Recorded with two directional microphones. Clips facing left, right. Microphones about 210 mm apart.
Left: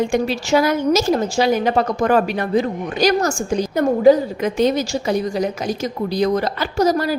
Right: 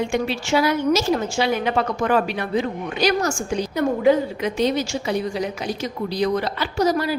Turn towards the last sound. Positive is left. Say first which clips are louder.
# left 3 dB
turn(degrees=40)  # may be behind; listen again after turning